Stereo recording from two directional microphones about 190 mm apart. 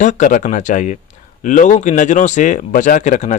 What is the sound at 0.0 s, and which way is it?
Speech, 40° left (ahead or behind).